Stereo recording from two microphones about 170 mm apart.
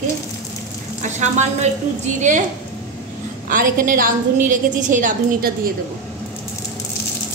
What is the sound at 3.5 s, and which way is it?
A woman's voice, 55° right (ahead or behind).